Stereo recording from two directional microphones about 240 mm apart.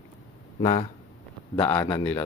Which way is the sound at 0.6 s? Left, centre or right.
Left.